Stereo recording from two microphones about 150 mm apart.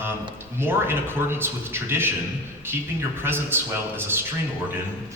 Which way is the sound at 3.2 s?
15° right (ahead or behind).